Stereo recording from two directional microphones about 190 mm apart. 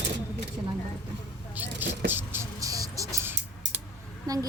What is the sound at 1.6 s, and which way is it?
Vehicle, 10° right (ahead or behind).